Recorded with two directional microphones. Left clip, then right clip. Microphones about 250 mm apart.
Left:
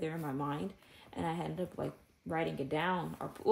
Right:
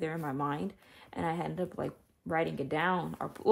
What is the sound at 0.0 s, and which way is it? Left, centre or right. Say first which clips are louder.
Speech: right 4 dB; centre.